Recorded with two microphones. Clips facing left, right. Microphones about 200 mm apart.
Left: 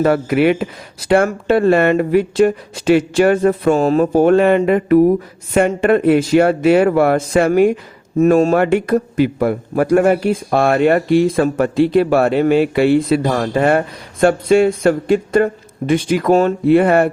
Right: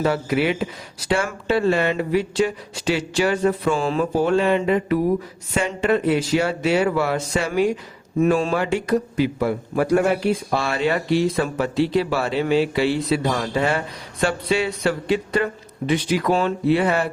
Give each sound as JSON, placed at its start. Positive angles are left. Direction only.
{"t": 0.0, "sound": "a man's voice", "side_deg": 55}
{"t": 8.2, "sound": "a man's voice", "side_deg": 45}